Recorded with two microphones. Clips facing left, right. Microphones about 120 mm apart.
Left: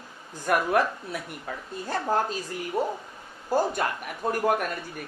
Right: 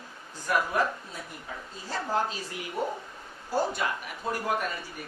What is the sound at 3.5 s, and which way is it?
Speech, 50° left (ahead or behind).